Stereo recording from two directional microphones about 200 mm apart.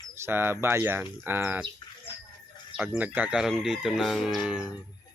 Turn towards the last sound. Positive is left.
turn(degrees=-5)  # may be behind; listen again after turning